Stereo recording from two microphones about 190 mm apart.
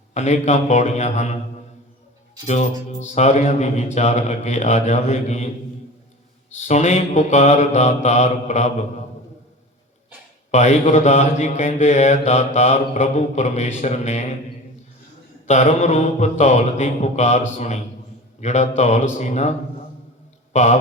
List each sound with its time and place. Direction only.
0.1 s speech: 35° left (ahead or behind)
2.5 s speech: 35° left (ahead or behind)
6.5 s speech: 35° left (ahead or behind)
10.5 s speech: 35° left (ahead or behind)
15.4 s speech: 35° left (ahead or behind)